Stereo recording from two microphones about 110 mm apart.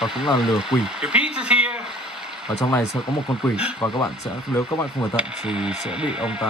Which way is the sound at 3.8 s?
25° left (ahead or behind).